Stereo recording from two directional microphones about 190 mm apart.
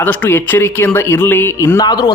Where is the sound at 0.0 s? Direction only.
10° left (ahead or behind).